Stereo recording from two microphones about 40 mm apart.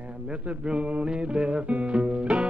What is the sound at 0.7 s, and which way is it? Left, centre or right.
Music, right.